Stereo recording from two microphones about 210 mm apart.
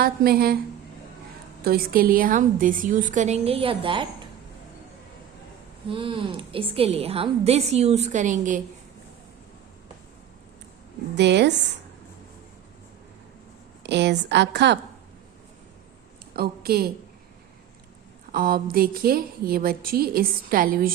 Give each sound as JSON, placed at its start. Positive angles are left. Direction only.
{"t": 0.0, "sound": "a woman's voice", "side_deg": -45}
{"t": 1.6, "sound": "a woman's voice", "side_deg": -45}
{"t": 5.9, "sound": "a woman's voice", "side_deg": -25}
{"t": 11.1, "sound": "a woman's voice", "side_deg": -55}
{"t": 13.8, "sound": "a woman's voice", "side_deg": -55}
{"t": 16.3, "sound": "a woman's voice", "side_deg": -45}
{"t": 18.3, "sound": "a woman's voice", "side_deg": -45}